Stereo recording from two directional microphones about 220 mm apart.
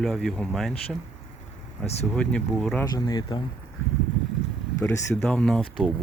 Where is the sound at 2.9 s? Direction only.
20° left (ahead or behind).